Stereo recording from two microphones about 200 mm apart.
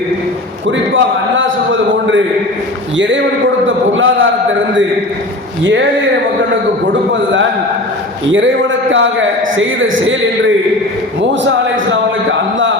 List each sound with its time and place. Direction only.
0.9 s a man's voice: 70° right (ahead or behind)
3.7 s a man's voice: 75° right (ahead or behind)
5.6 s a man's voice: 65° right (ahead or behind)
8.3 s a man's voice: 70° right (ahead or behind)
11.2 s a man's voice: 65° right (ahead or behind)